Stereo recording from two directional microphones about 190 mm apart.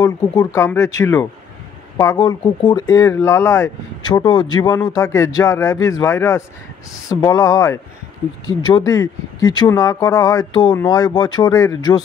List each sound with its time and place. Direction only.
0.0 s speech: 15° left (ahead or behind)